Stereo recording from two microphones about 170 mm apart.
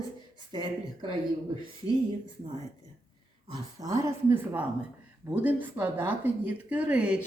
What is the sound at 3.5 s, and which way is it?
A woman's voice, 20° right (ahead or behind).